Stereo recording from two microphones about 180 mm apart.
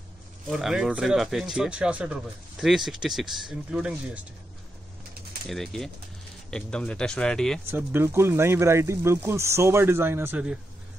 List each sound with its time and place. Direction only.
0.5 s speech: centre (ahead or behind)
5.5 s speech: centre (ahead or behind)
7.7 s speech: 15° right (ahead or behind)